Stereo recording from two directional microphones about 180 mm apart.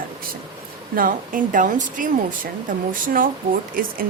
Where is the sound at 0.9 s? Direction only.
50° right (ahead or behind).